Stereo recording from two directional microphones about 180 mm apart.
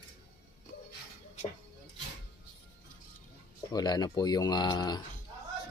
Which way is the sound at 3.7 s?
20° left (ahead or behind).